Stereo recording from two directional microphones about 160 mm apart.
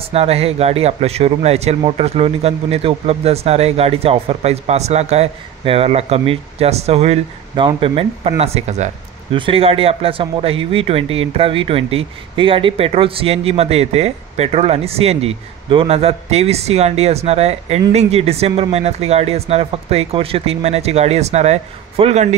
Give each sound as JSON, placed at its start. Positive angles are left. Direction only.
{"t": 0.0, "sound": "speech", "side_deg": -40}
{"t": 9.3, "sound": "speech", "side_deg": -35}